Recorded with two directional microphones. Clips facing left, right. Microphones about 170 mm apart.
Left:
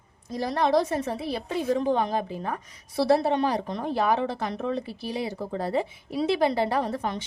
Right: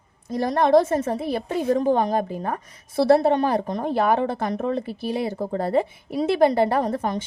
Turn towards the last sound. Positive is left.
turn(degrees=-50)  # may be behind; listen again after turning